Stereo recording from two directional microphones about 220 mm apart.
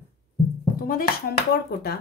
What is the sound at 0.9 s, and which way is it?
Speech, 40° left (ahead or behind).